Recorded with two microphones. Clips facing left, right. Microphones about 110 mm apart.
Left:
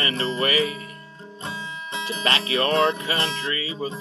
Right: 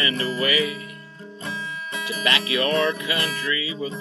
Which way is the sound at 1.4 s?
25° left (ahead or behind).